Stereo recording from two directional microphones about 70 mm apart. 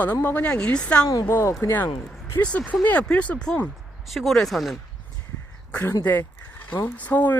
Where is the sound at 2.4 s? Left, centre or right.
Centre.